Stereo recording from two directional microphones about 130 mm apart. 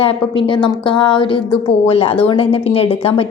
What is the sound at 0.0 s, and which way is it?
A woman's voice, 45° left (ahead or behind).